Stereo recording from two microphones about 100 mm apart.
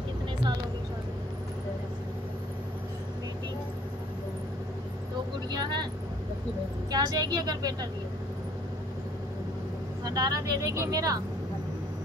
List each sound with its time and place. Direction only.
5.5 s vehicle: 45° right (ahead or behind)
6.9 s speech: 40° right (ahead or behind)
10.0 s speech: 40° right (ahead or behind)